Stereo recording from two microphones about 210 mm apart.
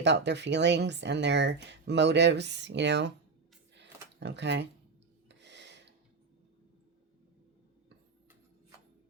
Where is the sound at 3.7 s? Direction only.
55° right (ahead or behind).